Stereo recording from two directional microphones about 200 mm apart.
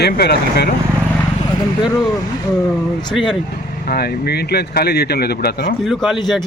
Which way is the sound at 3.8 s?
50° left (ahead or behind).